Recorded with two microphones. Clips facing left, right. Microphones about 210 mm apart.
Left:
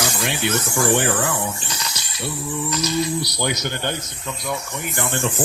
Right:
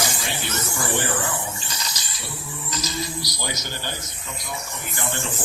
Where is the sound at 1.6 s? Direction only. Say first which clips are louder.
Left 3 dB; 65° left (ahead or behind).